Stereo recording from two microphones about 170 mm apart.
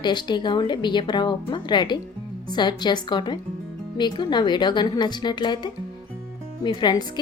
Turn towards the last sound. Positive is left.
turn(degrees=25)  # may be behind; listen again after turning